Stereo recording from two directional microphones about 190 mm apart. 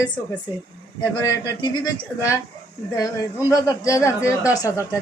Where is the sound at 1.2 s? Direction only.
20° left (ahead or behind).